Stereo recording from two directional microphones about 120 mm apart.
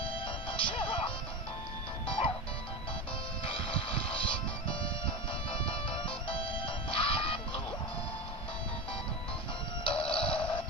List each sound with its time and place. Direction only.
0.6 s music: 45° left (ahead or behind)
3.4 s music: 50° left (ahead or behind)
9.9 s a sound: 10° left (ahead or behind)